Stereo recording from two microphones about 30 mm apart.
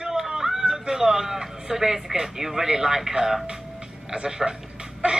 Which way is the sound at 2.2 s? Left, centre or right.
Centre.